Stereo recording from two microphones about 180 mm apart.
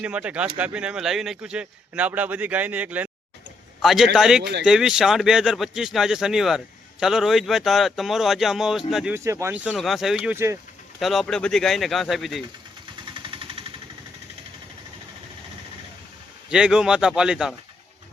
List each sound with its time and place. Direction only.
0.0 s speech: 5° right (ahead or behind)
9.1 s speech: 15° right (ahead or behind)
11.0 s speech: centre (ahead or behind)
13.2 s vehicle: 30° right (ahead or behind)
16.5 s speech: 5° right (ahead or behind)